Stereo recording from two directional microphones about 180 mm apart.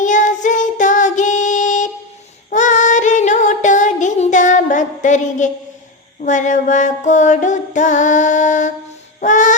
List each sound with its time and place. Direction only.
0.0 s child singing: 45° left (ahead or behind)
2.5 s female singing: 45° left (ahead or behind)
6.2 s music: 45° left (ahead or behind)
9.2 s a sound: 45° left (ahead or behind)